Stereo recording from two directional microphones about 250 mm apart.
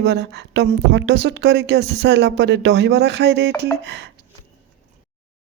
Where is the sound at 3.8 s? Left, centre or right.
Right.